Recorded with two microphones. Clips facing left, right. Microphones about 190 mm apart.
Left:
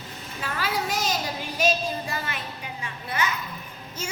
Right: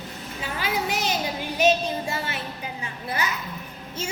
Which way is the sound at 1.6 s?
20° right (ahead or behind).